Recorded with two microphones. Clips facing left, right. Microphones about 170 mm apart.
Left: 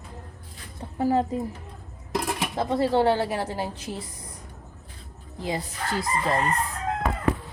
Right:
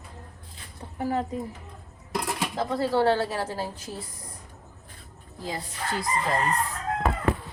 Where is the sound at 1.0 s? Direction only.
30° left (ahead or behind).